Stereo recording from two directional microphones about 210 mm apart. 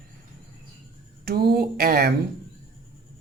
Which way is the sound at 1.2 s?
45° right (ahead or behind).